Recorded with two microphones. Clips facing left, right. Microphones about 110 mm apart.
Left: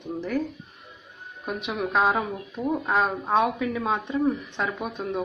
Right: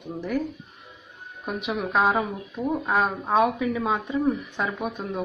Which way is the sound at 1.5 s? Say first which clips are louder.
Right 1 dB; centre (ahead or behind).